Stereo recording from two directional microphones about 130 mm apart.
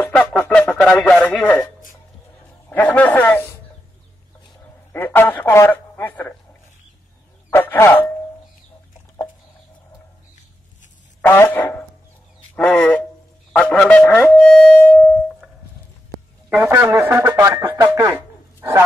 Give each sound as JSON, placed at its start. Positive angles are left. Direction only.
{"t": 0.1, "sound": "music", "side_deg": 10}
{"t": 0.8, "sound": "speech", "side_deg": 10}
{"t": 2.7, "sound": "speech", "side_deg": 15}
{"t": 4.9, "sound": "speech", "side_deg": 15}
{"t": 7.5, "sound": "speech", "side_deg": 15}
{"t": 11.2, "sound": "speech", "side_deg": 15}
{"t": 16.5, "sound": "a man's voice", "side_deg": -10}